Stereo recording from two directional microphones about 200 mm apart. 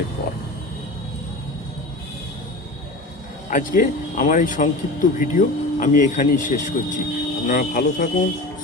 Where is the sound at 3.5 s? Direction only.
45° left (ahead or behind).